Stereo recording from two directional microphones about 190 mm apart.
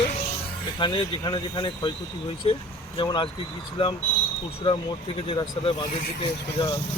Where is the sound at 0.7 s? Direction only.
25° left (ahead or behind).